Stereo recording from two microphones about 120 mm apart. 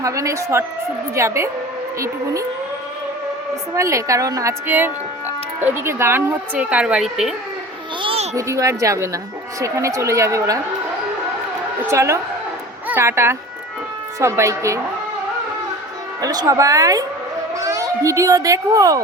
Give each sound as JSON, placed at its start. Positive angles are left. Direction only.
{"t": 0.0, "sound": "speech", "side_deg": -25}
{"t": 3.8, "sound": "speech", "side_deg": -25}
{"t": 4.6, "sound": "speech", "side_deg": -15}
{"t": 8.0, "sound": "a sound", "side_deg": -60}
{"t": 8.4, "sound": "speech", "side_deg": -25}
{"t": 11.9, "sound": "speech", "side_deg": -25}
{"t": 16.2, "sound": "speech", "side_deg": -30}